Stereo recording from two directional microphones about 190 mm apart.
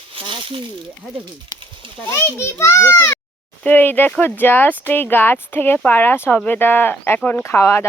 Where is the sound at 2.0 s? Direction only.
15° left (ahead or behind).